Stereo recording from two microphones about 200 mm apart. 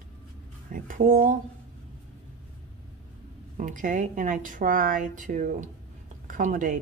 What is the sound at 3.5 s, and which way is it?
Speech, 40° right (ahead or behind).